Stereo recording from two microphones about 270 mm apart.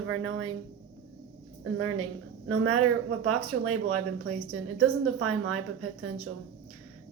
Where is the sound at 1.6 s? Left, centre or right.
Right.